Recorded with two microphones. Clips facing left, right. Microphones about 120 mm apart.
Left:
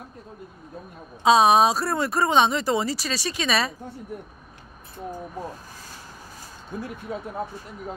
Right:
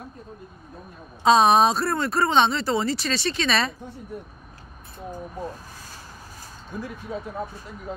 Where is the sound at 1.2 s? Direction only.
5° left (ahead or behind).